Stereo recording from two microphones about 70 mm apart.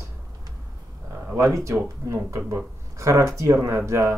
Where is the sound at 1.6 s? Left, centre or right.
Right.